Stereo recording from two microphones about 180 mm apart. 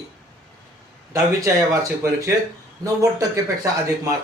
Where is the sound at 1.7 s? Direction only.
15° right (ahead or behind).